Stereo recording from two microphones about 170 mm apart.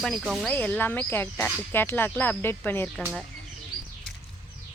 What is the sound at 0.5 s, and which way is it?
Speech, 10° left (ahead or behind).